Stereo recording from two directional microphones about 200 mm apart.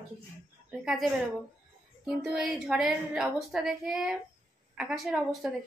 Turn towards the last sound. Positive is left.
turn(degrees=0)  # may be behind; listen again after turning